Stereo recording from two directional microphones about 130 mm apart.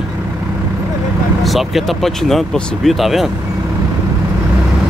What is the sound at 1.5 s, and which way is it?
Speech, centre (ahead or behind).